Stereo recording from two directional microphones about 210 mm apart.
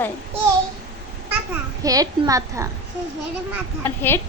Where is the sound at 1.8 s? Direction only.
15° right (ahead or behind).